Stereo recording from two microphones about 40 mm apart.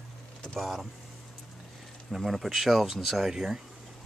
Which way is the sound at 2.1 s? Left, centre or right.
Centre.